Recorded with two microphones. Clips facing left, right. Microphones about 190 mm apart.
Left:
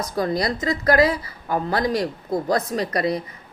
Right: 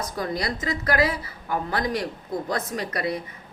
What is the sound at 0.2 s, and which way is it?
A woman's voice, 35° left (ahead or behind).